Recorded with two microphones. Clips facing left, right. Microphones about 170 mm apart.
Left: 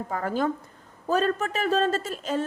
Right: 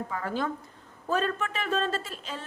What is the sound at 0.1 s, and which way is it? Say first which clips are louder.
A woman's voice: left 7 dB; 45° left (ahead or behind).